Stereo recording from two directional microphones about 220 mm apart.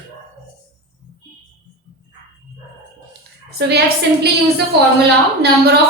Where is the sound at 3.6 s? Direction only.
50° right (ahead or behind).